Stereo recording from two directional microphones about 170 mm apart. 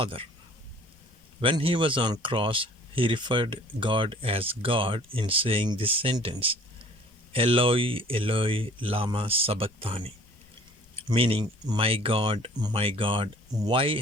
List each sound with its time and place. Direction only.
0.0 s speech: 30° right (ahead or behind)
1.4 s speech: 30° right (ahead or behind)